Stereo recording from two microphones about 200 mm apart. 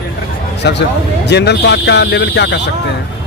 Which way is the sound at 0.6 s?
60° left (ahead or behind).